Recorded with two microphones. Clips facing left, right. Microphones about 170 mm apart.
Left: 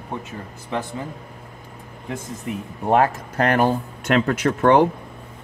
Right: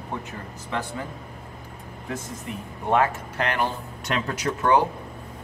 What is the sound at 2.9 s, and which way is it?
Speech, 40° left (ahead or behind).